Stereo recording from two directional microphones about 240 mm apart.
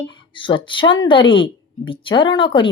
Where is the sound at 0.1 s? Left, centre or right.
Centre.